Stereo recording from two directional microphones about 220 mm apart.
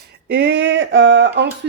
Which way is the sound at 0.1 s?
50° right (ahead or behind).